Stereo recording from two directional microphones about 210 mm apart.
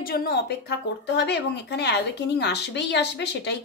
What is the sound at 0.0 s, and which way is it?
Speech, 50° left (ahead or behind).